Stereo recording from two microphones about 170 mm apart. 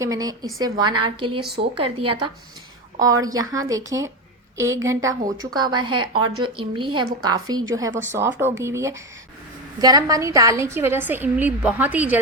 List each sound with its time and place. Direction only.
0.0 s a woman's voice: 20° right (ahead or behind)